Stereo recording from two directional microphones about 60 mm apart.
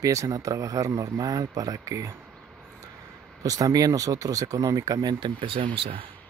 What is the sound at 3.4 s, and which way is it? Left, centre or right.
Speech, right.